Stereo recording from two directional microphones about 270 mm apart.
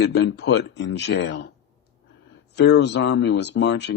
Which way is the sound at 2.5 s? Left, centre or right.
Left.